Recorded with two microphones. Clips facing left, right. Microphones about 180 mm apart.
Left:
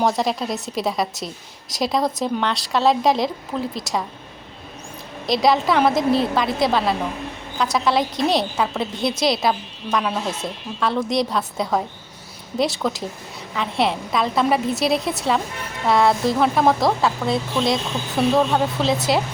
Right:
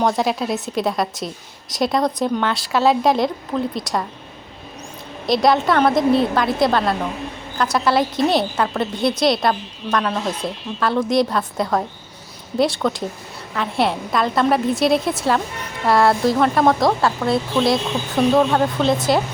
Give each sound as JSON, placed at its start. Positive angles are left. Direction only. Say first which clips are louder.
{"t": 0.0, "sound": "a woman's voice", "louder": "right 1 dB", "side_deg": 0}
{"t": 5.2, "sound": "a woman's voice", "louder": "right 2 dB", "side_deg": 0}